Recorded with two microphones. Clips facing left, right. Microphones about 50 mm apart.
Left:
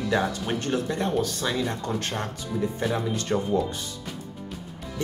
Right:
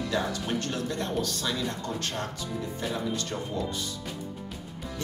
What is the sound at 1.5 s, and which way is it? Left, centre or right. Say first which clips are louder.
Speech: left 4 dB; left.